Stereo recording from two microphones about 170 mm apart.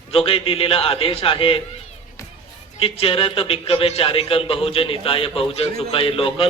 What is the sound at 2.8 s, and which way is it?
A man's voice, 35° left (ahead or behind).